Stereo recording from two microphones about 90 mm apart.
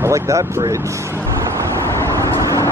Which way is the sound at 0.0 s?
35° right (ahead or behind).